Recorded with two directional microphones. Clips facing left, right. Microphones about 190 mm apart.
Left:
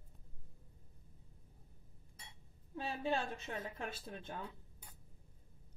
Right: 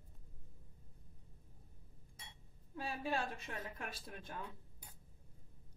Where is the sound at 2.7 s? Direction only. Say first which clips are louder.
Left 2 dB; 25° left (ahead or behind).